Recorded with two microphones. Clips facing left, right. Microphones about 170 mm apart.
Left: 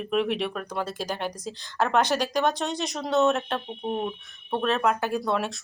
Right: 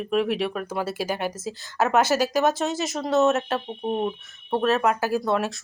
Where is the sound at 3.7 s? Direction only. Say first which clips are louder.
Right 3 dB; 15° right (ahead or behind).